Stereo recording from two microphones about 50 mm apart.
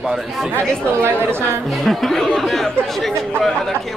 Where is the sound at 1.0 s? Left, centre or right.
Right.